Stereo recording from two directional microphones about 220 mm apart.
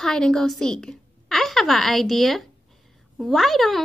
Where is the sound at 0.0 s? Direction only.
5° left (ahead or behind).